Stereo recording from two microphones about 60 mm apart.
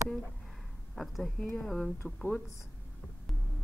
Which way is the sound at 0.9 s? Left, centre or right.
Centre.